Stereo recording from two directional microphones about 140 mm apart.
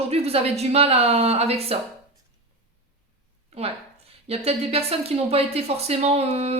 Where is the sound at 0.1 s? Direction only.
45° right (ahead or behind).